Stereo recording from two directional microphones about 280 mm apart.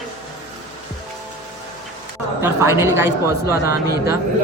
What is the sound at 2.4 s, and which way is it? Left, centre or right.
Speech, centre.